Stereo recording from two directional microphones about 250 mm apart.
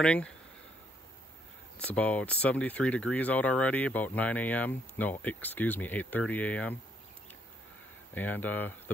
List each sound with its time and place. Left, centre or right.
0.0 s speech: centre
1.9 s speech: centre
8.1 s speech: centre